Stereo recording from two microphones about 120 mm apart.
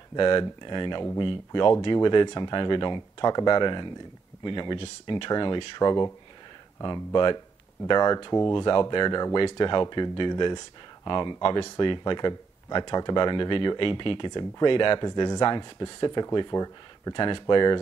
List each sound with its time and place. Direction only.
0.1 s speech: 40° left (ahead or behind)
11.4 s speech: 50° left (ahead or behind)